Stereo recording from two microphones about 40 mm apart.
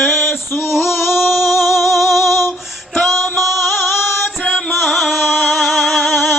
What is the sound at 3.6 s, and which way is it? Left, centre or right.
Music, left.